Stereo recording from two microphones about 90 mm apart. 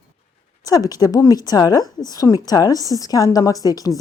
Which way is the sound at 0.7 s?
45° left (ahead or behind).